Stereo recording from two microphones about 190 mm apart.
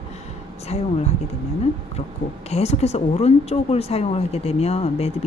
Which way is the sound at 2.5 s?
35° left (ahead or behind).